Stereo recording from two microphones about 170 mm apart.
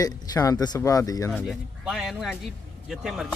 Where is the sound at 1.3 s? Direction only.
5° left (ahead or behind).